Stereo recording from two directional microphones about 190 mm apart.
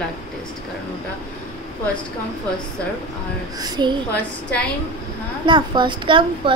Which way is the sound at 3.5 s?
20° right (ahead or behind).